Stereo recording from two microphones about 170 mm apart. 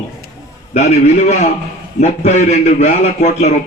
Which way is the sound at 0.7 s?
45° left (ahead or behind).